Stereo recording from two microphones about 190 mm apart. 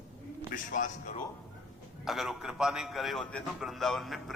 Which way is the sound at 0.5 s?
45° left (ahead or behind).